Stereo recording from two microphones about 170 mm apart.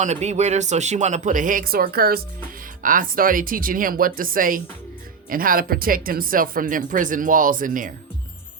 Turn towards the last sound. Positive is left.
turn(degrees=-50)  # may be behind; listen again after turning